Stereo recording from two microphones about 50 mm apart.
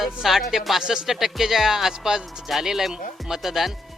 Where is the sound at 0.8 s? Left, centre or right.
Centre.